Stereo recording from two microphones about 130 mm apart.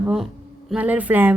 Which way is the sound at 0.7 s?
10° right (ahead or behind).